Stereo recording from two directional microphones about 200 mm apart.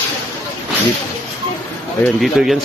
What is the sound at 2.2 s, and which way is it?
Speech, centre (ahead or behind).